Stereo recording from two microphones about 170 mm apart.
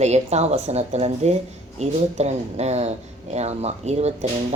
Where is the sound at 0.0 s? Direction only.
40° right (ahead or behind).